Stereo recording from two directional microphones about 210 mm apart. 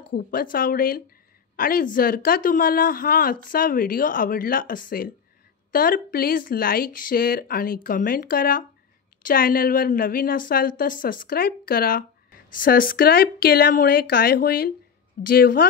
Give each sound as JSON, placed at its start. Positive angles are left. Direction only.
{"t": 0.1, "sound": "a woman's voice", "side_deg": 45}